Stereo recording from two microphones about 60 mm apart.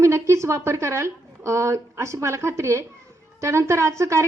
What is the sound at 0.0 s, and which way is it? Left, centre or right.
A woman's voice, right.